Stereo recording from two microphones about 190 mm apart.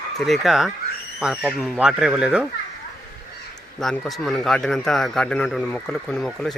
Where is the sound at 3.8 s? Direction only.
Centre (ahead or behind).